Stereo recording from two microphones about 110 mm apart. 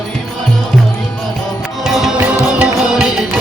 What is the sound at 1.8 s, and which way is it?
Music, 5° right (ahead or behind).